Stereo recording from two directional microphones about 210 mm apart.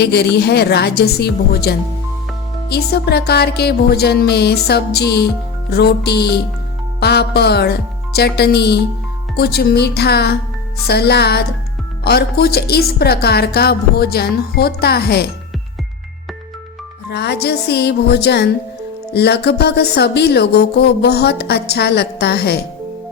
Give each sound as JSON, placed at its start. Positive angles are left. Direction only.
{"t": 0.0, "sound": "speech", "side_deg": 50}
{"t": 17.1, "sound": "speech", "side_deg": 50}